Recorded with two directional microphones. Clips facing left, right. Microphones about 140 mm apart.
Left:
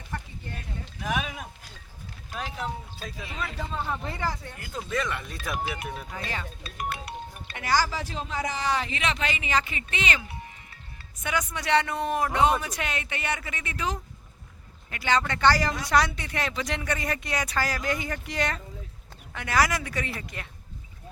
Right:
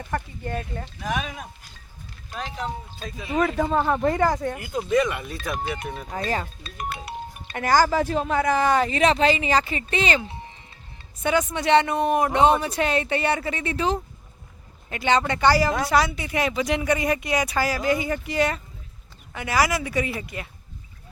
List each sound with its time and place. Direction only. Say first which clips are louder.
0.0 s speech: right 9 dB; 60° right (ahead or behind)
1.0 s speech: right 1 dB; 5° left (ahead or behind)
3.3 s speech: right 13 dB; 55° right (ahead or behind)
4.6 s speech: right 7 dB; 15° right (ahead or behind)
5.3 s speech: right 3 dB; centre (ahead or behind)
6.1 s speech: right 8 dB; 40° right (ahead or behind)
6.6 s speech: right 1 dB; 5° left (ahead or behind)
7.5 s speech: right 7 dB; 50° right (ahead or behind); by 20.5 s 5° right (ahead or behind)